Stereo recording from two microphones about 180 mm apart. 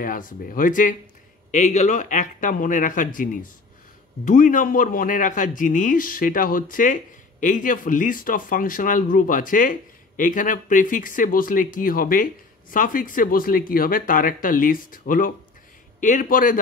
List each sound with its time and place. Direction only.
0.0 s a man's voice: 50° left (ahead or behind)